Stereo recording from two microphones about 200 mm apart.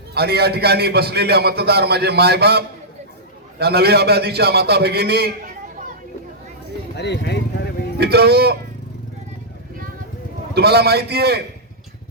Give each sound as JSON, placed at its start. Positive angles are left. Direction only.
{"t": 0.1, "sound": "a man's voice", "side_deg": -50}
{"t": 6.9, "sound": "a sound", "side_deg": 60}
{"t": 7.9, "sound": "a man's voice", "side_deg": -55}
{"t": 10.5, "sound": "a man's voice", "side_deg": -55}